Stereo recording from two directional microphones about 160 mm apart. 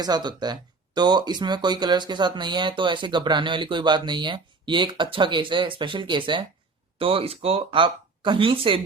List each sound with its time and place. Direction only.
0.0 s speech: 25° right (ahead or behind)